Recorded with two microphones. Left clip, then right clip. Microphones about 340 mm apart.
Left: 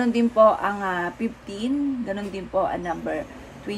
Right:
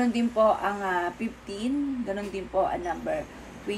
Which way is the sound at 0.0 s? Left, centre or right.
Left.